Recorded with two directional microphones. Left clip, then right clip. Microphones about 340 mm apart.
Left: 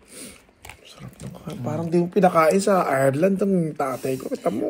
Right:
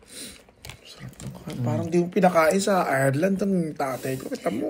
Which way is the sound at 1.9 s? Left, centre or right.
Left.